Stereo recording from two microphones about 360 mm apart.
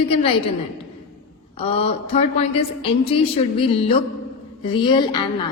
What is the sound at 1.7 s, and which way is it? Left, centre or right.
A woman's voice, centre.